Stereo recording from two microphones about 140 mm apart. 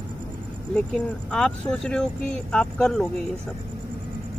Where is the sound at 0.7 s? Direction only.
5° left (ahead or behind).